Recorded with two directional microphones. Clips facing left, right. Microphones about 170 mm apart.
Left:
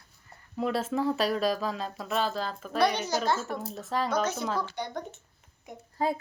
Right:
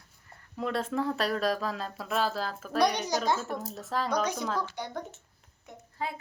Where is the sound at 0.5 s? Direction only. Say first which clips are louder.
Left 2 dB; 5° left (ahead or behind).